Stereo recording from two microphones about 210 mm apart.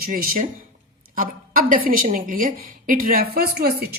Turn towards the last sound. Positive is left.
turn(degrees=-50)  # may be behind; listen again after turning